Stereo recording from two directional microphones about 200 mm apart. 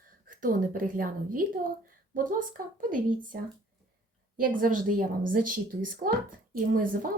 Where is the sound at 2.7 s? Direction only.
45° right (ahead or behind).